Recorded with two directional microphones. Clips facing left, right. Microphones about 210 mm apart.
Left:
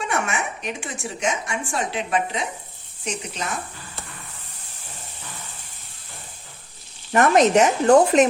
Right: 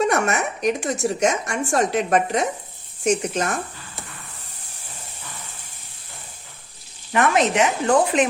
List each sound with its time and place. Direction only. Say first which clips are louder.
0.0 s a woman's voice: right 6 dB; 40° right (ahead or behind)
7.1 s speech: left 3 dB; 40° left (ahead or behind)